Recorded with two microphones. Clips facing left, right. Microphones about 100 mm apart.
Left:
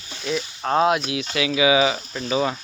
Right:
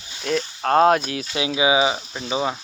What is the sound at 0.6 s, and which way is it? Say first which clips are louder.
Speech: right 3 dB; 45° right (ahead or behind).